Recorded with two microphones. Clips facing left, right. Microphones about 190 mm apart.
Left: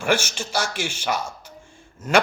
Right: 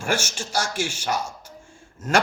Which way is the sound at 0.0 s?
60° left (ahead or behind).